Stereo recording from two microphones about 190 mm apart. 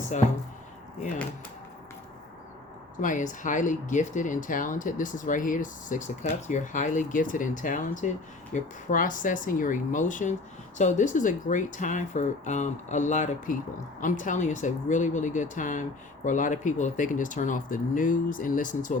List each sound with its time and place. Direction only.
3.0 s speech: 45° left (ahead or behind)